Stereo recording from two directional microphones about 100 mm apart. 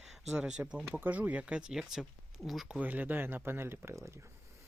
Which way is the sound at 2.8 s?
15° right (ahead or behind).